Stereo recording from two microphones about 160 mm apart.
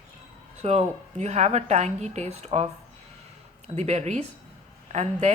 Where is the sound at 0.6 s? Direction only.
45° right (ahead or behind).